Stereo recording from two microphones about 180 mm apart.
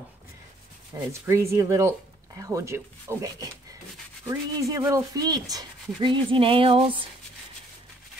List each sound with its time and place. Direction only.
0.9 s speech: 15° right (ahead or behind); by 7.1 s 30° right (ahead or behind)